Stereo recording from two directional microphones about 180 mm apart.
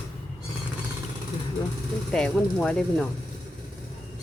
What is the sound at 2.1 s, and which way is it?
Speech, 5° left (ahead or behind).